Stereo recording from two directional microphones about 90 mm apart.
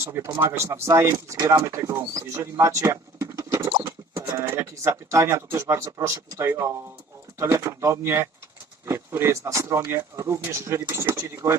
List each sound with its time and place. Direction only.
0.0 s speech: 30° right (ahead or behind)
4.1 s speech: 25° right (ahead or behind)